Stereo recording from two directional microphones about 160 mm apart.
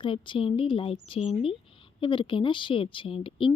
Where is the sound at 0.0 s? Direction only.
30° left (ahead or behind).